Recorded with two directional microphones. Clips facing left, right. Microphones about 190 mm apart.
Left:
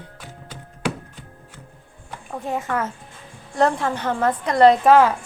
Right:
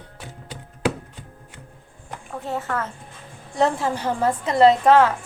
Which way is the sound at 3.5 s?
5° right (ahead or behind).